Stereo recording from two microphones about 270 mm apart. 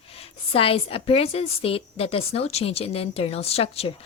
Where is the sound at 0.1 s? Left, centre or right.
Left.